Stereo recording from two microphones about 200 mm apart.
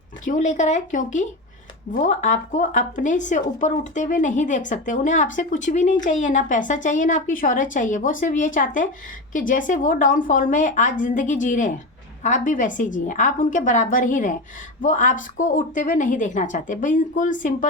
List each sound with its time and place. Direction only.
0.3 s speech: 35° left (ahead or behind)